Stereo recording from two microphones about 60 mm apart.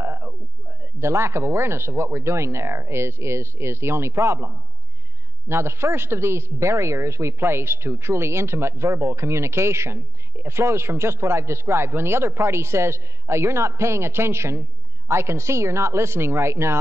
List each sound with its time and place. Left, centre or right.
0.0 s speech: right